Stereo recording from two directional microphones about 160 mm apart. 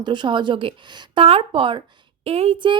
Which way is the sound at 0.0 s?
30° right (ahead or behind).